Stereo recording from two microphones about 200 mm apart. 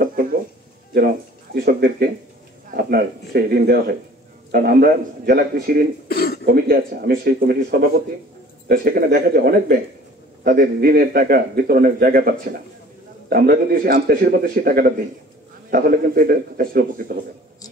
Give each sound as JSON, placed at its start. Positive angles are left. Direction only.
{"t": 0.0, "sound": "music", "side_deg": -45}
{"t": 0.9, "sound": "a man's voice", "side_deg": -50}
{"t": 6.0, "sound": "cough", "side_deg": 50}
{"t": 6.4, "sound": "a man's voice", "side_deg": -50}